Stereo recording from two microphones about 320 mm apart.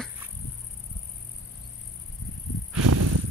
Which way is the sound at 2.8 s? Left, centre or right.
Right.